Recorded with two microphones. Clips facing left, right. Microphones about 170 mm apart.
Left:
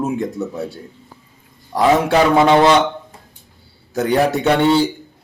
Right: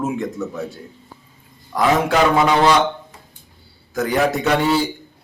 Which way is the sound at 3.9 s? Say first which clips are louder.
Left 3 dB; 30° left (ahead or behind).